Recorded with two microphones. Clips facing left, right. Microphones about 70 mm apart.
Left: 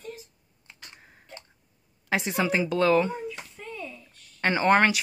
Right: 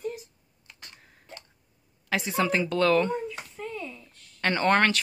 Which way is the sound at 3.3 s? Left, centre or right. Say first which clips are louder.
Right 3 dB; centre.